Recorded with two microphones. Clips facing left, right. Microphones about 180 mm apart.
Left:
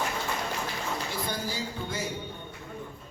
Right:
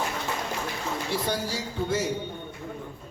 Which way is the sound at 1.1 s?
75° right (ahead or behind).